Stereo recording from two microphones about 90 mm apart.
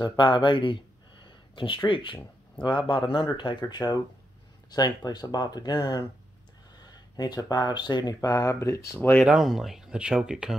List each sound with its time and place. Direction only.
0.2 s a sound: 60° left (ahead or behind)
1.9 s speech: 70° left (ahead or behind); by 9.1 s 30° left (ahead or behind)
9.2 s speech: 5° right (ahead or behind)